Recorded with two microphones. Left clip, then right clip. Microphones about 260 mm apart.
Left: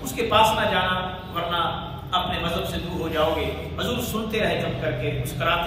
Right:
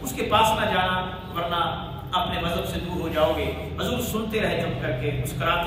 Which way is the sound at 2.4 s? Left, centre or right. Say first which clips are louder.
Left 1 dB; centre.